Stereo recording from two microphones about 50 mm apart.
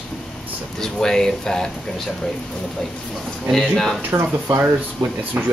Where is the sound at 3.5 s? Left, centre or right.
Centre.